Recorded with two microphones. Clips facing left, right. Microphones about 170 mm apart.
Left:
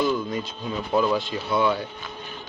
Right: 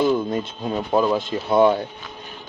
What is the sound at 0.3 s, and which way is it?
Speech, 45° right (ahead or behind).